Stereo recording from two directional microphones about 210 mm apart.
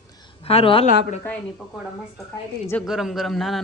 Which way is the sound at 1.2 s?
5° left (ahead or behind).